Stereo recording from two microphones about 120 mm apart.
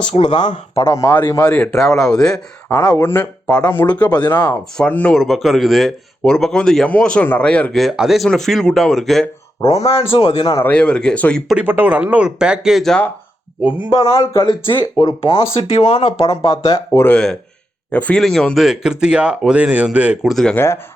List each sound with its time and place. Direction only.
0.2 s speech: 40° left (ahead or behind)
0.8 s speech: 25° left (ahead or behind); by 2.4 s 5° left (ahead or behind)
2.6 s speech: 20° left (ahead or behind)
5.1 s speech: centre (ahead or behind)
9.6 s a man's voice: 55° left (ahead or behind)
10.7 s speech: 10° left (ahead or behind)
11.5 s speech: 15° right (ahead or behind); by 13.1 s 5° left (ahead or behind)
13.7 s speech: 30° left (ahead or behind)
14.4 s speech: 40° left (ahead or behind)
15.5 s speech: 55° left (ahead or behind)
16.3 s speech: 35° left (ahead or behind)
17.0 s speech: 10° left (ahead or behind); by 20.3 s 10° right (ahead or behind)
20.3 s speech: 5° left (ahead or behind)